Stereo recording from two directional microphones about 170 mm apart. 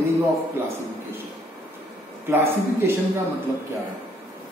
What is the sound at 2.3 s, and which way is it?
Speech, 15° right (ahead or behind).